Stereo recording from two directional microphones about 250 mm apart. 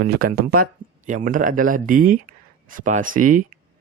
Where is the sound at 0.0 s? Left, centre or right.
Right.